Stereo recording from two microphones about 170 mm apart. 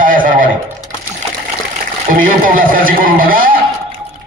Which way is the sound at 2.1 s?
55° right (ahead or behind).